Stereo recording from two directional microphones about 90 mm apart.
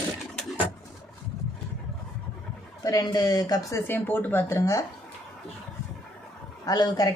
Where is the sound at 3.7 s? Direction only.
25° left (ahead or behind).